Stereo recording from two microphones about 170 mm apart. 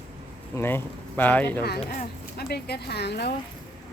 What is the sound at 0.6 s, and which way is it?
Speech, 15° left (ahead or behind).